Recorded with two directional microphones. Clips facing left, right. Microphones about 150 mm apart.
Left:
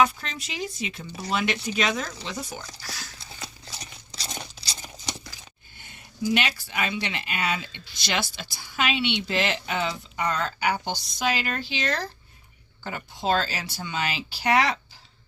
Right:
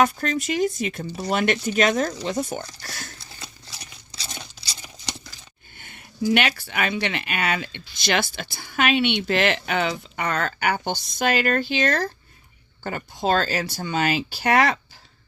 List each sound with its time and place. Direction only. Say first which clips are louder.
0.0 s speech: right 3 dB; 50° right (ahead or behind)
3.4 s a sound: left 3 dB; centre (ahead or behind)
5.7 s speech: right 5 dB; 60° right (ahead or behind)